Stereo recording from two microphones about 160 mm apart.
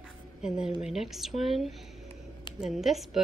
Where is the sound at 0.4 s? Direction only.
5° right (ahead or behind).